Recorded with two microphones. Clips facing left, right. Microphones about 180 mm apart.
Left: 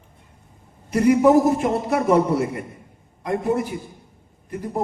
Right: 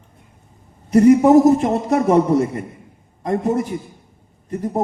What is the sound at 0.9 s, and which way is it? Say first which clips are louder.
A man's voice: right 5 dB; 40° right (ahead or behind).